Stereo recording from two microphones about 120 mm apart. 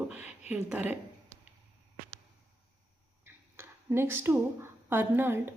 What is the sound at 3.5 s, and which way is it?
A woman's voice, 20° right (ahead or behind).